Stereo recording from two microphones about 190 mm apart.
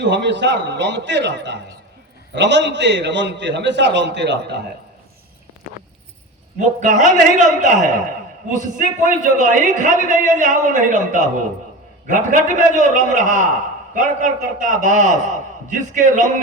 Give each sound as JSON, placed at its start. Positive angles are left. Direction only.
{"t": 0.0, "sound": "a man's voice", "side_deg": -65}
{"t": 6.6, "sound": "a man's voice", "side_deg": -40}